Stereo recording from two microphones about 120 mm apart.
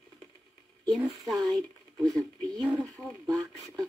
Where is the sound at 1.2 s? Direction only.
Centre (ahead or behind).